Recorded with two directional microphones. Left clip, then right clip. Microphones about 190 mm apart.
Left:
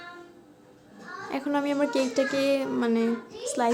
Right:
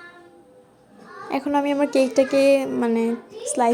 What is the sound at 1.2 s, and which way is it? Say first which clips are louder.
A child's voice: right 6 dB; 20° right (ahead or behind).